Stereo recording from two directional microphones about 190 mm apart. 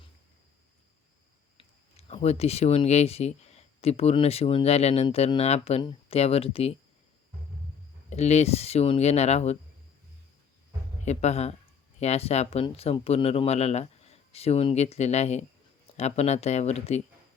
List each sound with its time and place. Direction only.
1.5 s speech: 30° left (ahead or behind)
8.1 s speech: 35° left (ahead or behind)
11.0 s speech: 35° left (ahead or behind)